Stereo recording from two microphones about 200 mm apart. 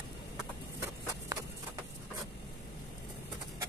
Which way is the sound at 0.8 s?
15° right (ahead or behind).